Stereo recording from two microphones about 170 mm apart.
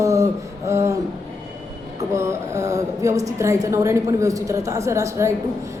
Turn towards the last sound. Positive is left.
turn(degrees=-15)  # may be behind; listen again after turning